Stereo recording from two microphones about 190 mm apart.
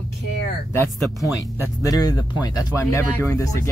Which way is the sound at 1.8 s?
20° left (ahead or behind).